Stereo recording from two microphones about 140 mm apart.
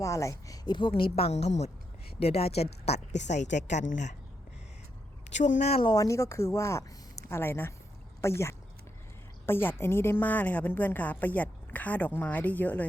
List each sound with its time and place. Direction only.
0.0 s a woman's voice: 20° left (ahead or behind); by 4.1 s 60° left (ahead or behind)
5.3 s a woman's voice: 60° left (ahead or behind)
5.8 s a woman's voice: 25° left (ahead or behind)